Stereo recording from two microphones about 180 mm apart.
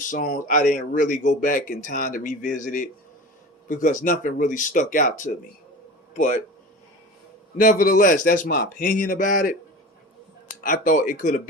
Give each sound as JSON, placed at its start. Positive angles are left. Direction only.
{"t": 0.1, "sound": "speech", "side_deg": 50}
{"t": 7.5, "sound": "speech", "side_deg": 50}
{"t": 10.6, "sound": "speech", "side_deg": 45}